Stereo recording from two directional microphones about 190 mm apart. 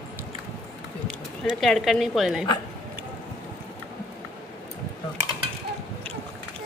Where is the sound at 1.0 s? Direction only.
Centre (ahead or behind).